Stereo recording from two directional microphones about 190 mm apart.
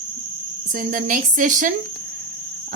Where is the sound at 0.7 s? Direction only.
45° right (ahead or behind).